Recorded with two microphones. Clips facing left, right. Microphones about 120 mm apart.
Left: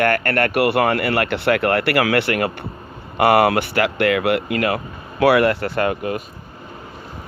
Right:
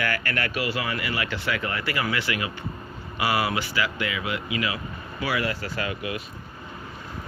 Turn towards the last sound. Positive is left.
turn(degrees=50)  # may be behind; listen again after turning